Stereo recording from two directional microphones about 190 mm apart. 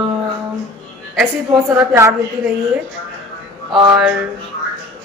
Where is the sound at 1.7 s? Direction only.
15° right (ahead or behind).